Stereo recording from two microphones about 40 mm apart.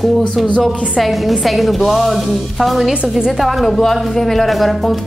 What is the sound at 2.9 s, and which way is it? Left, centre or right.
Speech, right.